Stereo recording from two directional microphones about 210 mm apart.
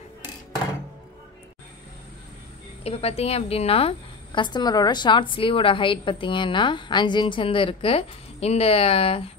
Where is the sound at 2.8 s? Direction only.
30° left (ahead or behind).